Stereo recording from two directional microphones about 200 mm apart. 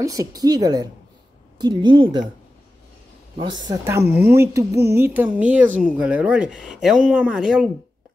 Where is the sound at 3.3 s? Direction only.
20° right (ahead or behind); by 7.7 s 5° right (ahead or behind).